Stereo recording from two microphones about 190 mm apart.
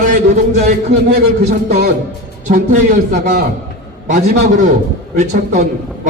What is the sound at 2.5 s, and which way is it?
Speech, 40° right (ahead or behind).